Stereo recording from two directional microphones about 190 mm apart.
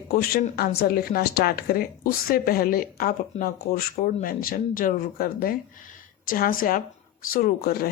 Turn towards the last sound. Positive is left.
turn(degrees=55)  # may be behind; listen again after turning